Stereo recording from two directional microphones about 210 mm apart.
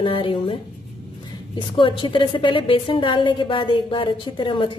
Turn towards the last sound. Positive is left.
turn(degrees=25)  # may be behind; listen again after turning